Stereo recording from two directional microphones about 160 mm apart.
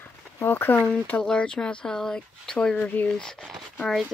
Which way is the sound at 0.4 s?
15° left (ahead or behind).